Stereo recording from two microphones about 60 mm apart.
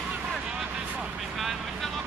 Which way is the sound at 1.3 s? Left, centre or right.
Centre.